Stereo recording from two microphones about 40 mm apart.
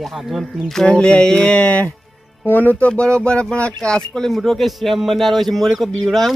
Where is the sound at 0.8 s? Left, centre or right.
Left.